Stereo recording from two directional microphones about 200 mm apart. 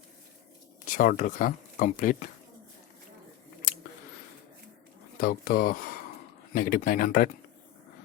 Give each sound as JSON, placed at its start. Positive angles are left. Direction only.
{"t": 0.9, "sound": "speech", "side_deg": 40}
{"t": 5.2, "sound": "speech", "side_deg": 45}